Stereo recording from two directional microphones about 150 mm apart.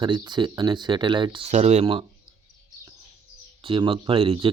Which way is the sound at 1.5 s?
50° right (ahead or behind).